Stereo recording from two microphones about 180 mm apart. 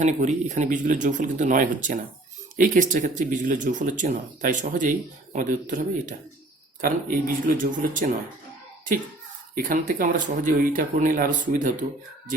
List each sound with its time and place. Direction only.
0.0 s speech: 45° right (ahead or behind)
9.6 s speech: 50° right (ahead or behind)